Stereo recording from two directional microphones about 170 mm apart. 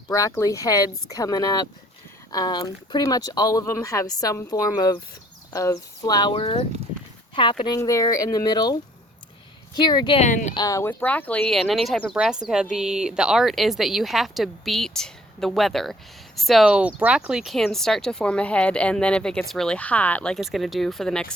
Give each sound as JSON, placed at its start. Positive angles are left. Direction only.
{"t": 0.1, "sound": "speech", "side_deg": 20}
{"t": 10.2, "sound": "speech", "side_deg": 45}
{"t": 10.5, "sound": "speech", "side_deg": 20}